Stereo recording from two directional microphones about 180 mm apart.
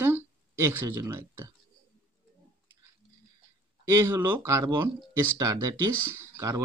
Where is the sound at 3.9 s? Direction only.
20° right (ahead or behind).